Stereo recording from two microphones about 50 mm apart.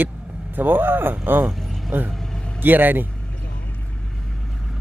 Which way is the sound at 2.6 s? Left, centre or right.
Right.